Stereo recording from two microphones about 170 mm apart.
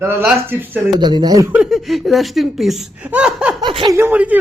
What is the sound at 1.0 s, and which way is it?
Speech, 25° right (ahead or behind).